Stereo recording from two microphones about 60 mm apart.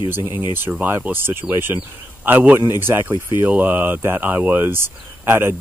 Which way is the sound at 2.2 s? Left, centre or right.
Right.